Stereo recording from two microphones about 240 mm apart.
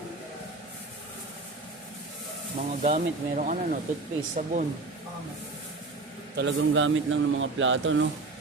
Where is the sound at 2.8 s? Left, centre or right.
Right.